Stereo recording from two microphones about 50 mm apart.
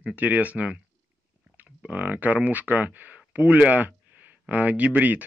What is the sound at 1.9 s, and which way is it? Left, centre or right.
Speech, right.